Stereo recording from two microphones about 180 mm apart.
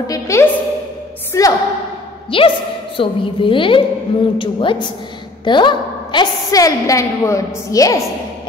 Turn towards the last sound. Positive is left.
turn(degrees=20)  # may be behind; listen again after turning